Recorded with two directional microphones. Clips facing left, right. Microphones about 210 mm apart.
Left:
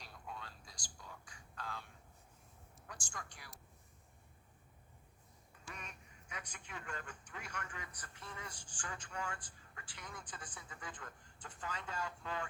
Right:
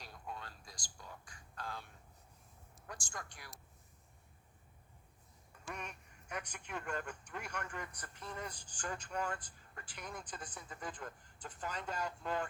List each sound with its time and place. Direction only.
0.0 s a sound: 45° right (ahead or behind)
2.8 s speech: 50° right (ahead or behind)
5.6 s speech: 60° right (ahead or behind)
8.2 s speech: 40° right (ahead or behind)